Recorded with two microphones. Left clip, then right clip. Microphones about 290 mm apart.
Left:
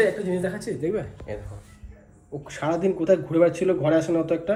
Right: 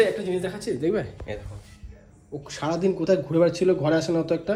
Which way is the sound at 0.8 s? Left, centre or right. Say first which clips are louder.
Right 2 dB; right.